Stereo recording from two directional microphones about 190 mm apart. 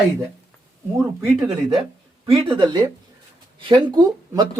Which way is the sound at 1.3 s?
20° right (ahead or behind).